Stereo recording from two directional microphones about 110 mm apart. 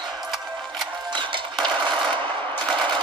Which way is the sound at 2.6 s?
45° right (ahead or behind).